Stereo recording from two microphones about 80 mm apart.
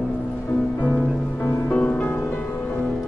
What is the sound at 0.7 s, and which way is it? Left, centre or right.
Music, left.